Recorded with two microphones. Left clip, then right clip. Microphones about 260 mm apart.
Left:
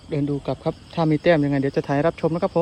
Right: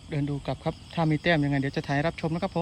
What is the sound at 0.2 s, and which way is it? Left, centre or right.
Speech, centre.